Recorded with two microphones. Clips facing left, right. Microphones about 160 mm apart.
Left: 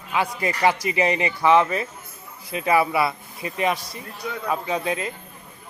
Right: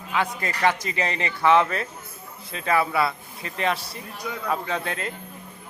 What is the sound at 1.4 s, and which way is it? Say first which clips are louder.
Speech: even; 5° left (ahead or behind).